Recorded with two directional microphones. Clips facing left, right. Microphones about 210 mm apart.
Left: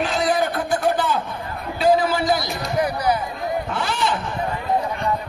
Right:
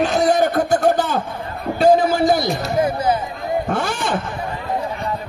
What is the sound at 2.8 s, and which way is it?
Speech, 25° right (ahead or behind).